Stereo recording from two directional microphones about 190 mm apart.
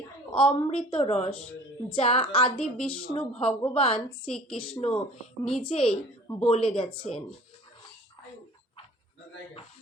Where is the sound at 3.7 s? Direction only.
30° left (ahead or behind).